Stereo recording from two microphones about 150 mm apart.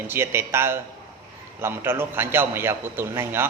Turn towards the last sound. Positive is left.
turn(degrees=-15)  # may be behind; listen again after turning